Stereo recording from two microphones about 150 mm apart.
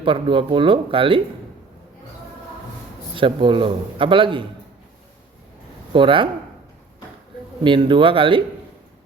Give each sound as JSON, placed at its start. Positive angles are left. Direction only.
{"t": 0.0, "sound": "a man's voice", "side_deg": -35}
{"t": 3.2, "sound": "a man's voice", "side_deg": -35}
{"t": 5.9, "sound": "a man's voice", "side_deg": -35}
{"t": 7.6, "sound": "a man's voice", "side_deg": -35}